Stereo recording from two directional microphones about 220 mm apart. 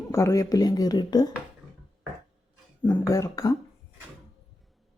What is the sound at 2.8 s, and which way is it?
Speech, 10° left (ahead or behind).